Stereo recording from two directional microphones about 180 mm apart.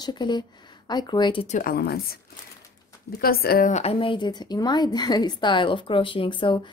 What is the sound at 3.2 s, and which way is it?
A woman's voice, 55° left (ahead or behind).